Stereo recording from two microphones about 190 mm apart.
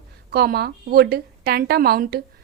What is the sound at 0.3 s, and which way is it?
A woman's voice, 55° right (ahead or behind).